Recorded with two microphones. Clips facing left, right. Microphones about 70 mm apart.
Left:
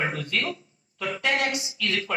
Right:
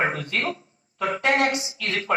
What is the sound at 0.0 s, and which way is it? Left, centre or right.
A woman's voice, right.